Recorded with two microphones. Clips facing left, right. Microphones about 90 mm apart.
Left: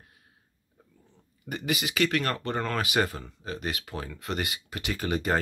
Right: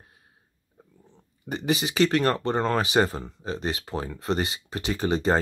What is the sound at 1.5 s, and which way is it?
Speech, 30° right (ahead or behind).